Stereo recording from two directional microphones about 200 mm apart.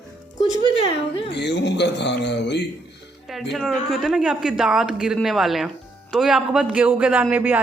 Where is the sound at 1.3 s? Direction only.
60° left (ahead or behind).